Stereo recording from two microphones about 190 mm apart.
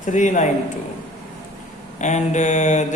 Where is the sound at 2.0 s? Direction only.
40° left (ahead or behind).